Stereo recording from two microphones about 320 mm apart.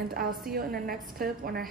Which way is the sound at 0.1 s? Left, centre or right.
Right.